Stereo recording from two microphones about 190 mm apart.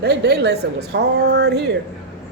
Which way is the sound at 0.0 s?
60° right (ahead or behind).